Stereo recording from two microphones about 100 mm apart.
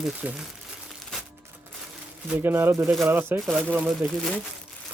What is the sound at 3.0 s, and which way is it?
Speech, 25° right (ahead or behind).